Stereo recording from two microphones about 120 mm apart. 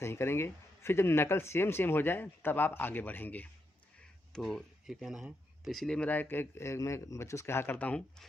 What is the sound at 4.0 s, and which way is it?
Speech, centre (ahead or behind).